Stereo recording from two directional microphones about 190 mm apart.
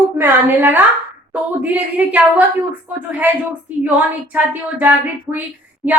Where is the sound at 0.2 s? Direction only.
10° right (ahead or behind).